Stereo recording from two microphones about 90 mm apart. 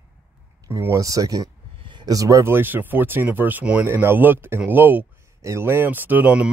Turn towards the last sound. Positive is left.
turn(degrees=-20)  # may be behind; listen again after turning